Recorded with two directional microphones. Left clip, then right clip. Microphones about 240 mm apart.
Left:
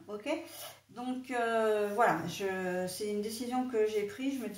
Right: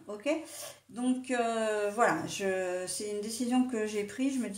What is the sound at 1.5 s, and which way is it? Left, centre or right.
Speech, right.